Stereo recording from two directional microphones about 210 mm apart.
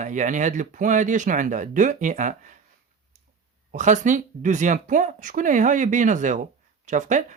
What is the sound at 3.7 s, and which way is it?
Speech, 35° right (ahead or behind).